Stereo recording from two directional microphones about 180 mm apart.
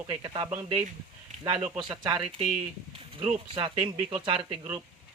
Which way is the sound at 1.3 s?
35° right (ahead or behind).